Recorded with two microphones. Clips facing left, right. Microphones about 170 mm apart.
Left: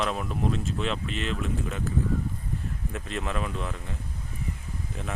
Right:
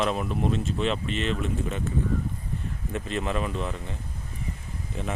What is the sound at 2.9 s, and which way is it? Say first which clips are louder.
Speech: right 4 dB; centre (ahead or behind).